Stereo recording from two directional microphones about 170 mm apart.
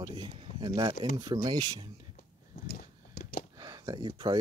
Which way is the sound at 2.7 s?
60° left (ahead or behind).